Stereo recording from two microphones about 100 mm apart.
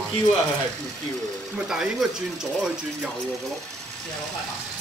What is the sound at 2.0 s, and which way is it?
Speech, 5° right (ahead or behind).